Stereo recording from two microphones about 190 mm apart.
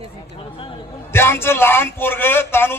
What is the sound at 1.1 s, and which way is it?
A man's voice, 10° left (ahead or behind).